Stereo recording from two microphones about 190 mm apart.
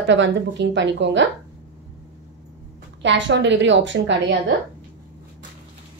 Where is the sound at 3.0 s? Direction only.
70° right (ahead or behind).